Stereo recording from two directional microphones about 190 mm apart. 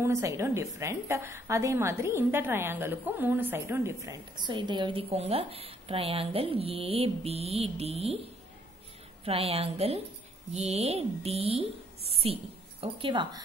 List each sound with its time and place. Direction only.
0.0 s a woman's voice: 15° right (ahead or behind); by 8.2 s 30° right (ahead or behind)
9.2 s a woman's voice: 30° right (ahead or behind)